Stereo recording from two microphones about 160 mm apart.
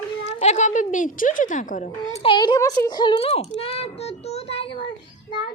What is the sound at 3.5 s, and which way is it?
Child singing, 40° left (ahead or behind).